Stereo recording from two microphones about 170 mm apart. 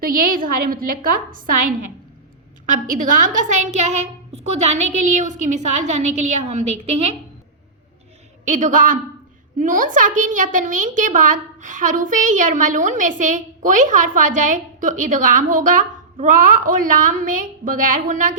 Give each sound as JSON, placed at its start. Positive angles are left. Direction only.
{"t": 0.3, "sound": "a woman's voice", "side_deg": -55}
{"t": 2.6, "sound": "a child's voice", "side_deg": -50}
{"t": 8.4, "sound": "a child's voice", "side_deg": -45}